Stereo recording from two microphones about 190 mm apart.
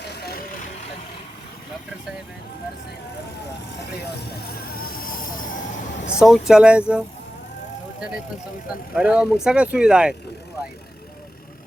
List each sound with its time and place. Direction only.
0.1 s vehicle: 55° left (ahead or behind)
4.0 s vehicle: 55° left (ahead or behind)
6.1 s speech: centre (ahead or behind)
9.0 s speech: 5° right (ahead or behind)